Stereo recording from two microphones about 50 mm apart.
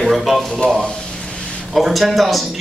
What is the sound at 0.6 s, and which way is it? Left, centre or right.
Speech, left.